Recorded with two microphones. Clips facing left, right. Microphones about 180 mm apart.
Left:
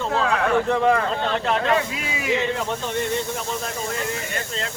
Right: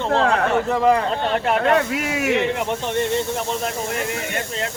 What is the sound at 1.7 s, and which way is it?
Speech, 65° right (ahead or behind).